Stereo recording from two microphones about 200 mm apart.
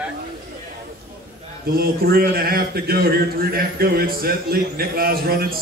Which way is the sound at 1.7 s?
50° right (ahead or behind).